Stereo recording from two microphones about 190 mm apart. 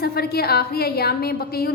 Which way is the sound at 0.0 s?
55° left (ahead or behind).